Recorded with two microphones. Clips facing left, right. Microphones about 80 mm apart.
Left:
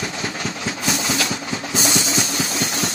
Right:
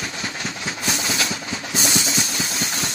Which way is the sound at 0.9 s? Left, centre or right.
Left.